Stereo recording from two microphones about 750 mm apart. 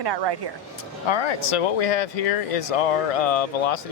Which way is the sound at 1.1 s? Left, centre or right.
Left.